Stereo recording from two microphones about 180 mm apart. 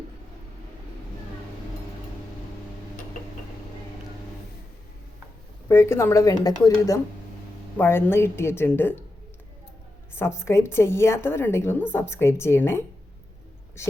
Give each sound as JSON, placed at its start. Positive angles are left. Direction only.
{"t": 5.6, "sound": "a woman's voice", "side_deg": 15}
{"t": 10.2, "sound": "a woman's voice", "side_deg": 15}